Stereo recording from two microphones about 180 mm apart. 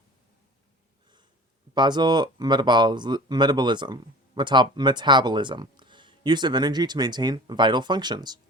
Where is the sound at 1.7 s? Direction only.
25° right (ahead or behind).